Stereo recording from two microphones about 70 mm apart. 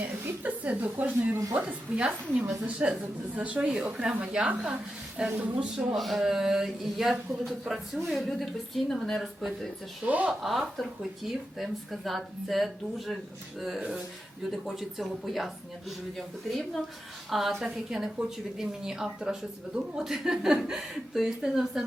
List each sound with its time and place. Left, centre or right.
0.3 s speech: right; by 9.6 s centre
10.0 s speech: centre
10.4 s speech: centre